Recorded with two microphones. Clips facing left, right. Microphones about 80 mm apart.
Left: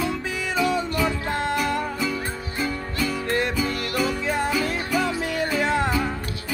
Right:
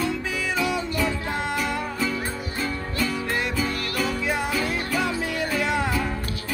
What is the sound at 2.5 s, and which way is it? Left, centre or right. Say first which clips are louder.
Music: left 1 dB; centre.